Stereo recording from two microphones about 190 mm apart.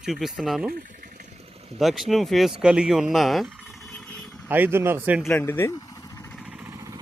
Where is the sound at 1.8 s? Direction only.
Centre (ahead or behind).